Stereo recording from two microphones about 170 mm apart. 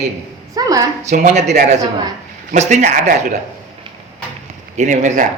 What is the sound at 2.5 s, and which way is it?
Speech, 45° right (ahead or behind).